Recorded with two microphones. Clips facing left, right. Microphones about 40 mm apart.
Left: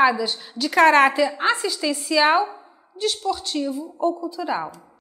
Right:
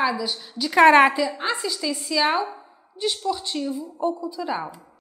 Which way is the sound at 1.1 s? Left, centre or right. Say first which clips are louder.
Left 4 dB; centre.